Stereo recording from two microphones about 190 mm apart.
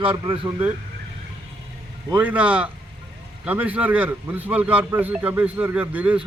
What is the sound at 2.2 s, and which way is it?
A man's voice, 5° right (ahead or behind).